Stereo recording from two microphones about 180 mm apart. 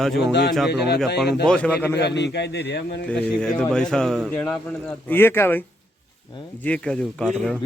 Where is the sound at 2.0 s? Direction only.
70° left (ahead or behind).